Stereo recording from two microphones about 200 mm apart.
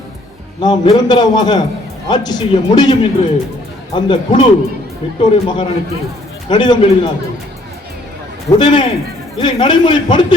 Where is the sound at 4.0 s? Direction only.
25° left (ahead or behind).